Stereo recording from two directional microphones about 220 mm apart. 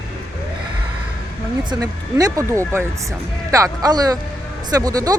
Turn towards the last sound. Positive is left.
turn(degrees=-15)  # may be behind; listen again after turning